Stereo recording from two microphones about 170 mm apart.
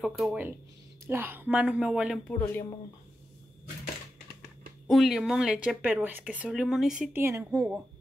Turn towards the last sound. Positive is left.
turn(degrees=-5)  # may be behind; listen again after turning